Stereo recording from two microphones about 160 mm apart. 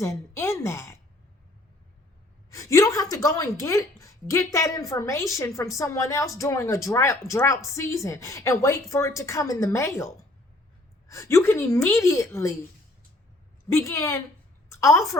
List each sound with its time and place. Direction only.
0.0 s a woman's voice: 20° left (ahead or behind)
2.5 s a woman's voice: 20° left (ahead or behind)
11.1 s a woman's voice: 15° left (ahead or behind)
13.7 s a woman's voice: 15° left (ahead or behind)